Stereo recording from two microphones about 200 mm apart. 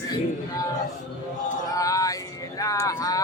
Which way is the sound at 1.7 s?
15° left (ahead or behind).